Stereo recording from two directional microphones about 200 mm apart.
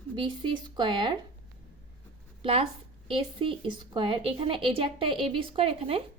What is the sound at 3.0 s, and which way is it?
A woman's voice, 25° right (ahead or behind).